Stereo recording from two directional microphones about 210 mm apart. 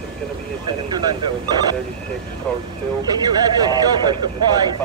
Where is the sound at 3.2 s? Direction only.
20° right (ahead or behind).